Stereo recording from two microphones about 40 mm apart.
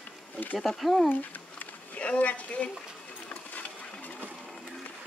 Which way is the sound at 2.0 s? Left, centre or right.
Left.